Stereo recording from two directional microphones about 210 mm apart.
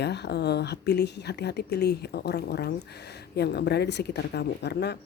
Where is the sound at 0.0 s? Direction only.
55° left (ahead or behind).